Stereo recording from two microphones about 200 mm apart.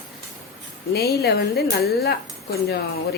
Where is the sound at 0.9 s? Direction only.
50° left (ahead or behind).